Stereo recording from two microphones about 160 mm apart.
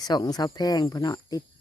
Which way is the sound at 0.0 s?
25° left (ahead or behind).